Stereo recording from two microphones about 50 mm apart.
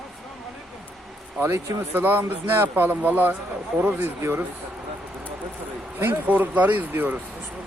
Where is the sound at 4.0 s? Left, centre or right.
Right.